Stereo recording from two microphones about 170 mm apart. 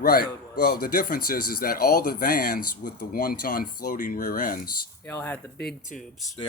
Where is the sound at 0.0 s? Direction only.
60° left (ahead or behind).